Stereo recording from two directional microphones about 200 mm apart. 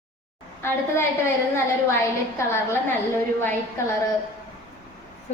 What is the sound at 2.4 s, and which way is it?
Speech, 15° left (ahead or behind).